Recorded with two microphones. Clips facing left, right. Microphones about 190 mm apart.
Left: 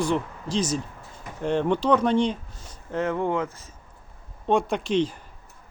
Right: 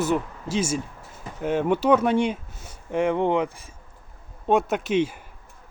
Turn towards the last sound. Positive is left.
turn(degrees=-5)  # may be behind; listen again after turning